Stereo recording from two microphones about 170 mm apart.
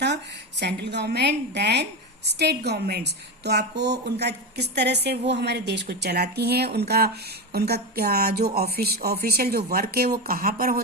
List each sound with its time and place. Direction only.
0.6 s a woman's voice: 80° right; by 10.8 s 60° right (ahead or behind)